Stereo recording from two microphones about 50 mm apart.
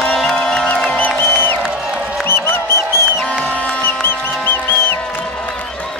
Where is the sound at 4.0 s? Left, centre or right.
Left.